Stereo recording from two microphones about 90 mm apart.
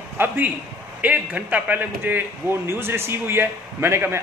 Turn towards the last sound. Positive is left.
turn(degrees=-25)  # may be behind; listen again after turning